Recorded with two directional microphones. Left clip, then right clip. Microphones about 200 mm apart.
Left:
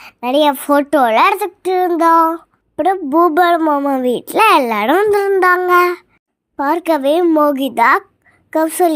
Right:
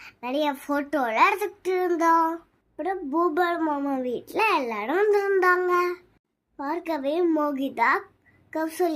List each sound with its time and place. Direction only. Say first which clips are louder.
0.0 s speech: left 13 dB; 35° left (ahead or behind)
4.1 s speech: left 13 dB; 40° left (ahead or behind)
4.9 s a woman's voice: left 6 dB; 35° left (ahead or behind)